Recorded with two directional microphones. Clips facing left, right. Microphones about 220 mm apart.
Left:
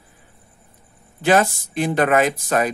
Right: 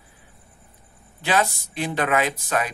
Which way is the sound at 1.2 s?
45° left (ahead or behind).